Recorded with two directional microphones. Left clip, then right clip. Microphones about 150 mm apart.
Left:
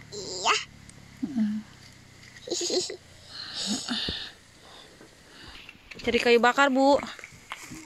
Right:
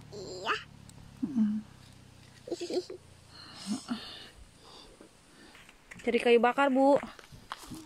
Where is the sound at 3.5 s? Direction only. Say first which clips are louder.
Left 9 dB; 75° left (ahead or behind).